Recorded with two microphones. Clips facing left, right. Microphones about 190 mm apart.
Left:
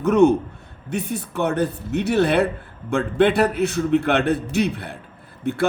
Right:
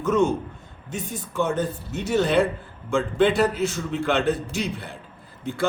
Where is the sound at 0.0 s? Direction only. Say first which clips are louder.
Left 6 dB; 65° left (ahead or behind).